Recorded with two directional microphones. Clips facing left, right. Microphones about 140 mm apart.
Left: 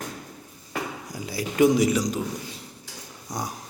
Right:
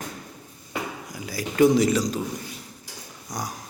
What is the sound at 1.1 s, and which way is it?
Speech, 30° left (ahead or behind).